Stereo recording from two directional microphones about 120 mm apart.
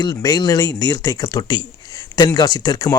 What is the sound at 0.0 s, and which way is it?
Speech, 35° left (ahead or behind).